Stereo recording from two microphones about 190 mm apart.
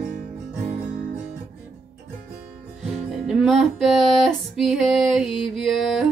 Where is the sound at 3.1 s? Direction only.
Centre (ahead or behind).